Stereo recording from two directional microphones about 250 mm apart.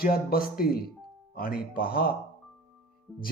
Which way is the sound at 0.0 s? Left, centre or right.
Left.